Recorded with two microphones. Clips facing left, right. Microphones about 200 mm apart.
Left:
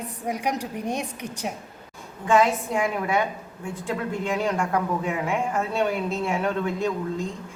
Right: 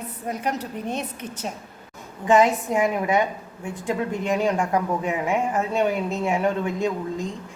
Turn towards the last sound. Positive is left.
turn(degrees=-15)  # may be behind; listen again after turning